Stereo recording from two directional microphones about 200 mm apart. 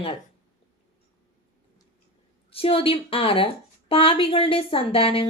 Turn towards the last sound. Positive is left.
turn(degrees=25)  # may be behind; listen again after turning